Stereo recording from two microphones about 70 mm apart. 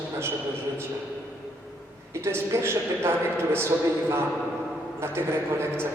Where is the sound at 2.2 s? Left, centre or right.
Right.